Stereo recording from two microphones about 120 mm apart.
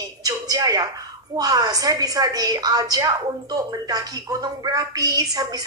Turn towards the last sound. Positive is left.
turn(degrees=-30)  # may be behind; listen again after turning